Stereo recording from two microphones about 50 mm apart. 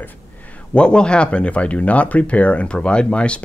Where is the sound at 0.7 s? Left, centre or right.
Centre.